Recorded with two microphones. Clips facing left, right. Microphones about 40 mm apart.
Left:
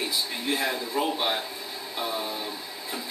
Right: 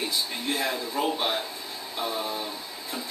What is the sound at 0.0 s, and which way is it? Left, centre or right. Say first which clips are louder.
Speech: even; centre.